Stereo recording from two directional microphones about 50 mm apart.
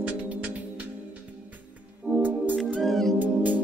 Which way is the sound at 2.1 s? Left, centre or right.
Right.